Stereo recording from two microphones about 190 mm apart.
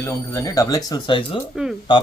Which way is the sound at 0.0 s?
15° left (ahead or behind).